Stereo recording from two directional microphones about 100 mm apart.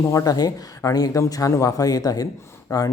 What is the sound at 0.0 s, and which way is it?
A man's voice, 35° left (ahead or behind).